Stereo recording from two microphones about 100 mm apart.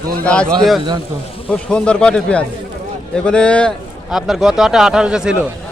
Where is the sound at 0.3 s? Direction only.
10° left (ahead or behind).